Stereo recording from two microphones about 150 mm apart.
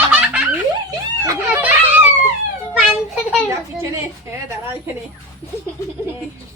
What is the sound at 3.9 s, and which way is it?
Speech, 20° right (ahead or behind).